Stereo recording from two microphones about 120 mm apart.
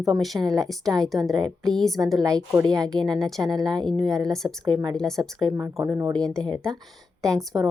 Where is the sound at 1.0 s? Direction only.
Centre (ahead or behind).